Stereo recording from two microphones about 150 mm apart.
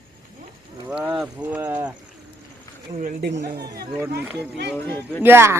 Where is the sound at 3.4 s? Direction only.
90° right.